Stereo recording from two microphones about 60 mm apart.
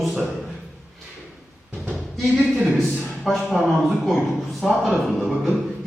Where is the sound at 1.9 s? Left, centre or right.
Centre.